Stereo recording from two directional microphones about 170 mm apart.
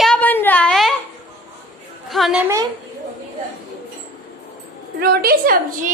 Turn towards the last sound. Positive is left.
turn(degrees=-55)  # may be behind; listen again after turning